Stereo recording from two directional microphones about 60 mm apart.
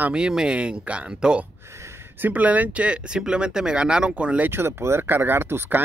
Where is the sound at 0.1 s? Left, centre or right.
Centre.